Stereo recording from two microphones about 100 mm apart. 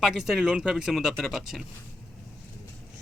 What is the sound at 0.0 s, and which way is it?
A man's voice, 5° right (ahead or behind).